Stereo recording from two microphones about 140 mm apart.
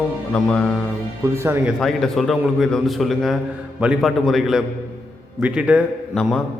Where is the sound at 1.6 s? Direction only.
Centre (ahead or behind).